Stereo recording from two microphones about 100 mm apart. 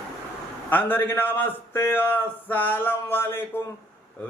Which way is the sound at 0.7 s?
20° left (ahead or behind).